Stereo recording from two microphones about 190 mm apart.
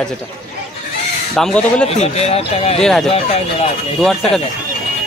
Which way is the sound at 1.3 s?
5° left (ahead or behind).